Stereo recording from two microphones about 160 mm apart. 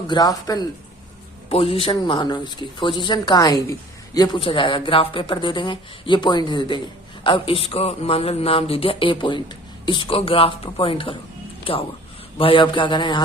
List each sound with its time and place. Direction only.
0.1 s speech: 25° left (ahead or behind)
1.5 s speech: 35° left (ahead or behind)